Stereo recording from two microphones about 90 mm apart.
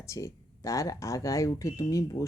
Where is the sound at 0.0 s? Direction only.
35° left (ahead or behind).